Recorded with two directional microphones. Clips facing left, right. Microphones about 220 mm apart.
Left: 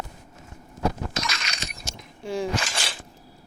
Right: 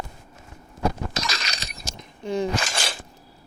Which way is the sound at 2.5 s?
40° right (ahead or behind).